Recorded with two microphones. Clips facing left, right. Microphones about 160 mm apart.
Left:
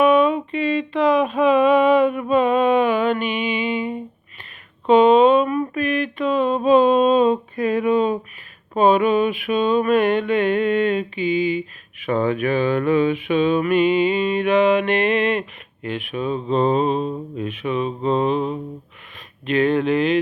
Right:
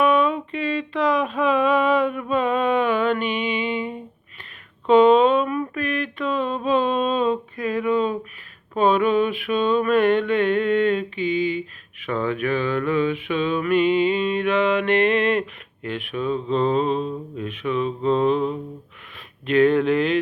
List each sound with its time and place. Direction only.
0.0 s a sound: 5° left (ahead or behind)
4.9 s mantra: 5° left (ahead or behind)
6.6 s a sound: 10° left (ahead or behind)
7.5 s speech: 20° left (ahead or behind)
8.7 s music: 15° left (ahead or behind)
19.5 s speech: centre (ahead or behind)